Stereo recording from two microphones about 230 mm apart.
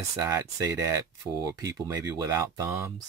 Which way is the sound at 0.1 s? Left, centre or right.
Centre.